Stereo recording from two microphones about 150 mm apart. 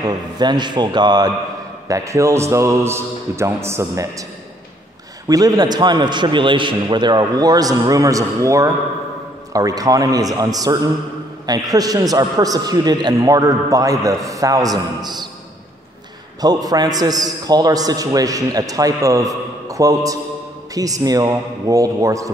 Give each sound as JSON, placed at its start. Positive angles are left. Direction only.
{"t": 0.0, "sound": "a man's voice", "side_deg": -30}
{"t": 5.3, "sound": "a man's voice", "side_deg": -25}
{"t": 16.3, "sound": "a man's voice", "side_deg": -25}